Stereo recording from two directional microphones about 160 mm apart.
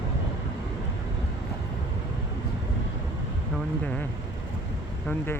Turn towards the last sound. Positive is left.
turn(degrees=10)  # may be behind; listen again after turning